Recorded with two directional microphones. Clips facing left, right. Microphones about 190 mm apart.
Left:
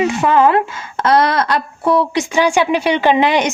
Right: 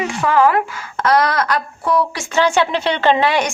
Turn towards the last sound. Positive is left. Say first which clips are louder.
# left 2 dB
turn(degrees=20)  # may be behind; listen again after turning